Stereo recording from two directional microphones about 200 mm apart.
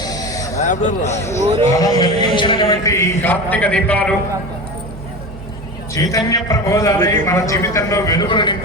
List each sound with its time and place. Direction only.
0.6 s a man's voice: 35° left (ahead or behind)
1.4 s a man's voice: 35° right (ahead or behind)
1.7 s a man's voice: 20° left (ahead or behind)
5.9 s a man's voice: 15° left (ahead or behind)